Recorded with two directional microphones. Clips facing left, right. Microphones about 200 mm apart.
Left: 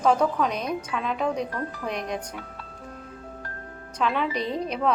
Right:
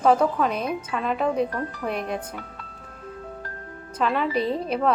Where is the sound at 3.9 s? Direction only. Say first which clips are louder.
Right 2 dB; centre (ahead or behind).